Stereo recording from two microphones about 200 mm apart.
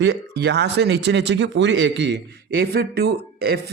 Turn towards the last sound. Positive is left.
turn(degrees=-50)  # may be behind; listen again after turning